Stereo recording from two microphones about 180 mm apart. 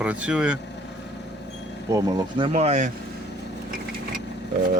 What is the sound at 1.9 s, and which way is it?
Speech, 20° right (ahead or behind).